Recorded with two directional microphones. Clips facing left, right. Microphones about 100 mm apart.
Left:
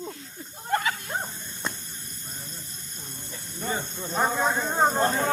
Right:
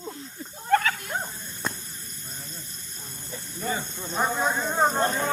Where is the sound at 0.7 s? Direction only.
10° left (ahead or behind).